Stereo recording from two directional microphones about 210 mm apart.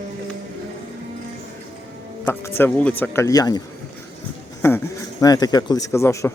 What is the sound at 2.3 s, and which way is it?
A man's voice, 10° left (ahead or behind).